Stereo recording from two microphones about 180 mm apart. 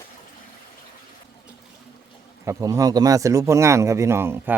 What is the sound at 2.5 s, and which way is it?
Speech, 20° right (ahead or behind).